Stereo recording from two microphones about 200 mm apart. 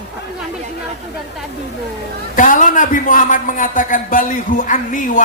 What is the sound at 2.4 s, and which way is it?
Speech, 40° left (ahead or behind).